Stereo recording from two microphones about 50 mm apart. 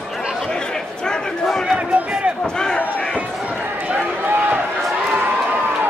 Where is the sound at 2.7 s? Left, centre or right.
Left.